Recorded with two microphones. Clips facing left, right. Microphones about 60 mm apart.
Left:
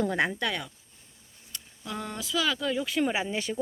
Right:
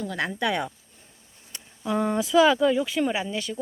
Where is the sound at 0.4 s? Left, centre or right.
Centre.